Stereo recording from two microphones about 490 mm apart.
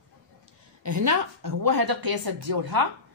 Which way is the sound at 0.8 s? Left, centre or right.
Right.